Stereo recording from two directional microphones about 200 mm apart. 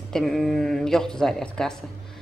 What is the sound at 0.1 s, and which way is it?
A woman's voice, centre (ahead or behind).